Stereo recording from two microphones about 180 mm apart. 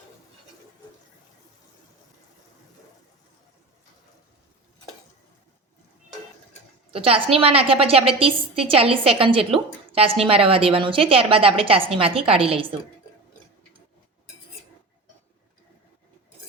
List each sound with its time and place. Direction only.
6.9 s a woman's voice: 30° right (ahead or behind)